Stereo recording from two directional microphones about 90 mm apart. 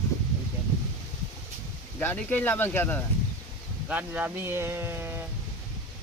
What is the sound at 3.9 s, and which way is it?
Speech, 15° right (ahead or behind).